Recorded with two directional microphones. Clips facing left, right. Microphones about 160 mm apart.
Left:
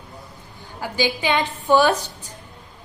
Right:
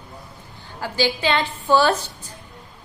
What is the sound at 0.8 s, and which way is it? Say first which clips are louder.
A woman's voice: right 1 dB; 15° left (ahead or behind).